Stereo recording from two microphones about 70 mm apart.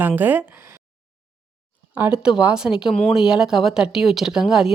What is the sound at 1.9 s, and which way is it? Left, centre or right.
A woman's voice, centre.